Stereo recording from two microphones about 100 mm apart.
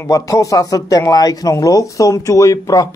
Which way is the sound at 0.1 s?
35° left (ahead or behind).